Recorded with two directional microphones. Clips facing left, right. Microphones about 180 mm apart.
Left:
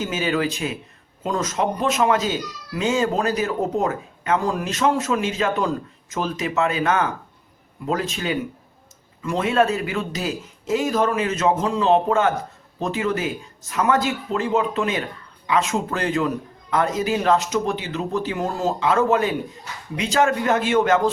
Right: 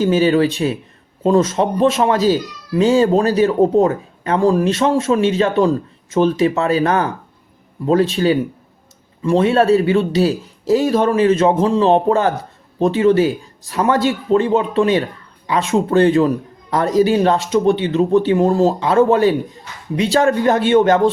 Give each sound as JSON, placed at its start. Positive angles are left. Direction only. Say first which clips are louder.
{"t": 0.0, "sound": "speech", "louder": "right 9 dB", "side_deg": -35}